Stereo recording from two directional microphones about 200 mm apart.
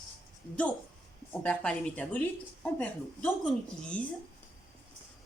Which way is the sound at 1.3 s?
5° left (ahead or behind).